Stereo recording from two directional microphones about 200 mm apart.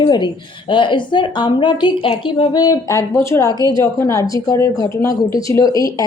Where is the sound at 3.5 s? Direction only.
20° right (ahead or behind).